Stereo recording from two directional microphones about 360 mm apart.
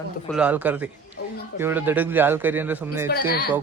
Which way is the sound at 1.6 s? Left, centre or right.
Centre.